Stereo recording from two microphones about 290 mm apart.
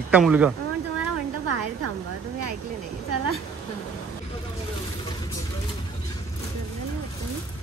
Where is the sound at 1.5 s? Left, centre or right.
Right.